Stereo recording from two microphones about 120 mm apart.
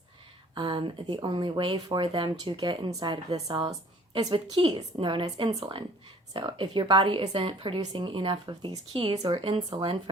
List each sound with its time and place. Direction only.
0.5 s a woman's voice: 40° right (ahead or behind)
3.2 s a woman's voice: 60° right (ahead or behind)
4.1 s a woman's voice: 40° right (ahead or behind)
9.1 s a woman's voice: 35° right (ahead or behind)
9.6 s speech: 45° right (ahead or behind)